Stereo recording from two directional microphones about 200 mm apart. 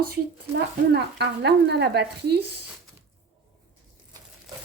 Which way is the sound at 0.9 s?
55° right (ahead or behind).